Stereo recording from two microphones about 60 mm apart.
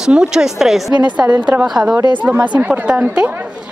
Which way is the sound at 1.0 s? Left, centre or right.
Right.